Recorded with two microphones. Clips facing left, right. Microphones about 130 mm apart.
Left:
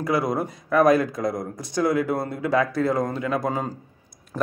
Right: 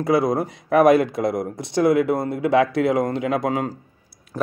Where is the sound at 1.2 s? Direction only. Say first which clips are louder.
Right 4 dB; 60° right (ahead or behind).